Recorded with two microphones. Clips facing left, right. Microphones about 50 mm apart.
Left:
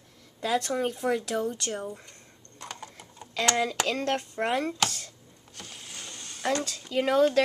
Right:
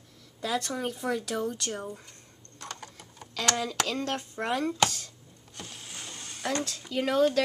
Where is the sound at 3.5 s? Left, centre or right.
Centre.